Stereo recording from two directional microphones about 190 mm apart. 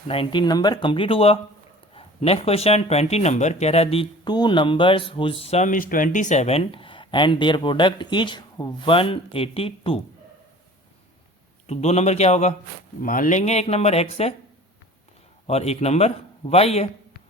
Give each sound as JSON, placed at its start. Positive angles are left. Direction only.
{"t": 0.1, "sound": "speech", "side_deg": 25}
{"t": 11.6, "sound": "a man's voice", "side_deg": 35}
{"t": 15.4, "sound": "a man's voice", "side_deg": 35}